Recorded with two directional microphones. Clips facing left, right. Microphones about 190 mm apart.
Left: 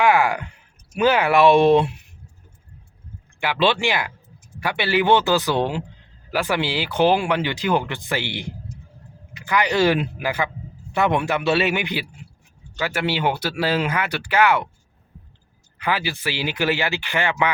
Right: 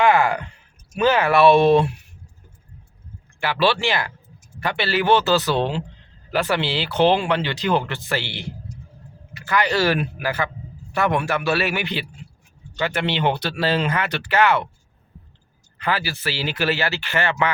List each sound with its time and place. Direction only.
0.0 s a sound: 10° left (ahead or behind)
0.9 s speech: 15° left (ahead or behind)
3.4 s a man's voice: 15° left (ahead or behind)
15.8 s speech: 15° left (ahead or behind)